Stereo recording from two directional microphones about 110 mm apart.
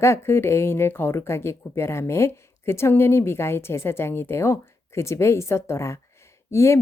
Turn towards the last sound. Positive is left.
turn(degrees=25)  # may be behind; listen again after turning